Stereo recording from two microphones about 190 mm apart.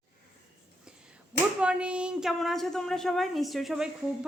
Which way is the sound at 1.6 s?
5° right (ahead or behind).